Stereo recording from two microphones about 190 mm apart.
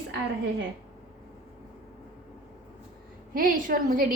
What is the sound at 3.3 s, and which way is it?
Speech, 50° right (ahead or behind).